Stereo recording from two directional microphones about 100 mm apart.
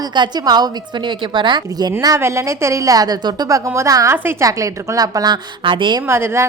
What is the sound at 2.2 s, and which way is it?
A woman's voice, 30° right (ahead or behind).